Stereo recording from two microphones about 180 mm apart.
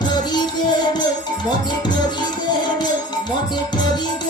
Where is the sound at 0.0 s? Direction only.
25° left (ahead or behind).